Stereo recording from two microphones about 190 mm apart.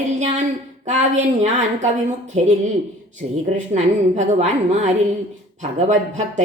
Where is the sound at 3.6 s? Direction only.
40° right (ahead or behind).